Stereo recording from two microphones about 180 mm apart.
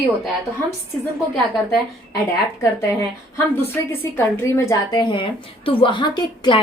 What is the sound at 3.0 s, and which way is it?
A woman's voice, 15° left (ahead or behind).